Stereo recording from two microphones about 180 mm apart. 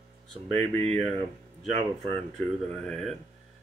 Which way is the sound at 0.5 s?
35° right (ahead or behind).